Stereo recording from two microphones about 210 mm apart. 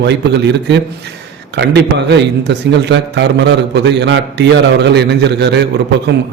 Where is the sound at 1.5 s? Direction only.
55° right (ahead or behind).